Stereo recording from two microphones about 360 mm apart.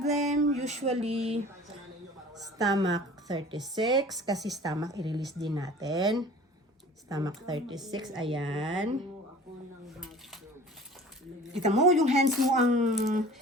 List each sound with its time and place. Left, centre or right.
0.0 s music: centre
2.3 s a woman's voice: centre
4.4 s a woman's voice: centre
9.8 s dishes: centre
11.6 s a woman's voice: centre